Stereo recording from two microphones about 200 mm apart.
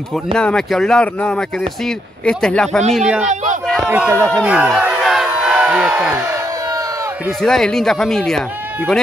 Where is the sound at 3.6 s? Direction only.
Centre (ahead or behind).